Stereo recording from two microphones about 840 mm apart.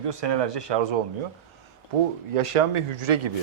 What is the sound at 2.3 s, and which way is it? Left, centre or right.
Speech, right.